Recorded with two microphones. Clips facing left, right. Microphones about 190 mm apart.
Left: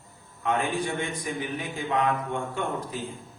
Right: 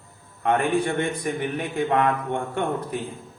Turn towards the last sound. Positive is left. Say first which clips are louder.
# right 5 dB
turn(degrees=-60)  # may be behind; listen again after turning